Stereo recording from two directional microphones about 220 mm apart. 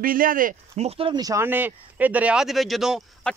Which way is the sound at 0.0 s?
40° right (ahead or behind).